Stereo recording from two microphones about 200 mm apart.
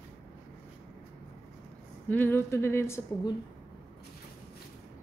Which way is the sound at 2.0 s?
10° left (ahead or behind).